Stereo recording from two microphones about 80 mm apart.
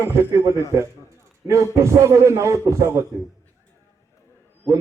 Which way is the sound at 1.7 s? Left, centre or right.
Right.